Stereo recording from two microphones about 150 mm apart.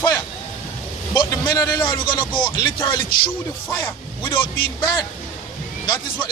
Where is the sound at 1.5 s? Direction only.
25° left (ahead or behind).